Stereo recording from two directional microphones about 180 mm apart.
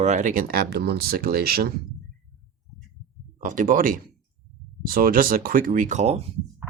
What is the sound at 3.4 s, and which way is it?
Speech, 50° right (ahead or behind).